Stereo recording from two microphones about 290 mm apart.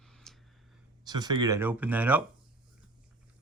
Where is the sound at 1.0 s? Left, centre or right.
Centre.